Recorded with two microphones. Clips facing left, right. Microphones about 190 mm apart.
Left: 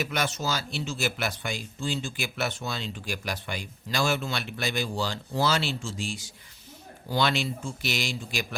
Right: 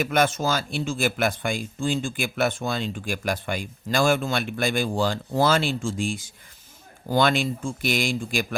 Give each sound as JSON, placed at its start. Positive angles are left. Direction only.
{"t": 0.0, "sound": "speech", "side_deg": -50}